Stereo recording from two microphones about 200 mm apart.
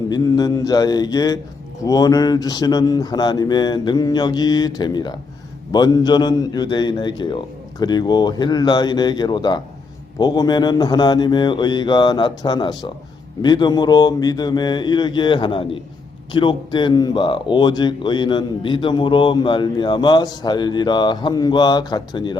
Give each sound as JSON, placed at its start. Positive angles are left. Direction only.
{"t": 0.1, "sound": "speech", "side_deg": 20}